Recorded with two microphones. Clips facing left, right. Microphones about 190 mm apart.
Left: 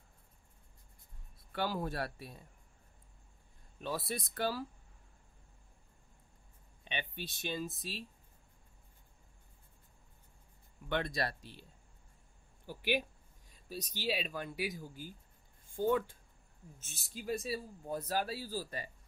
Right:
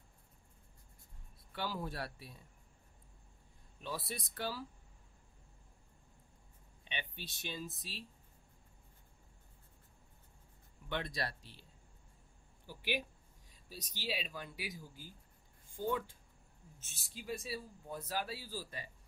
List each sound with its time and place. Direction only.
1.5 s speech: 50° left (ahead or behind)
3.8 s speech: 50° left (ahead or behind)
6.8 s speech: 50° left (ahead or behind)
10.9 s speech: 50° left (ahead or behind)
12.6 s speech: 50° left (ahead or behind)
17.1 s speech: 45° left (ahead or behind)